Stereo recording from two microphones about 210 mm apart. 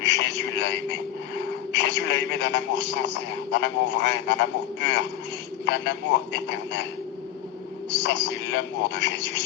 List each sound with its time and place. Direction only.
0.0 s a sound: 55° left (ahead or behind)
1.4 s a man's voice: 55° left (ahead or behind)
8.0 s a man's voice: 55° left (ahead or behind)